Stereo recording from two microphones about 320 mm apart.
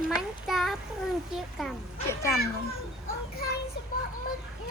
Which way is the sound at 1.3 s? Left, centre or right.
Centre.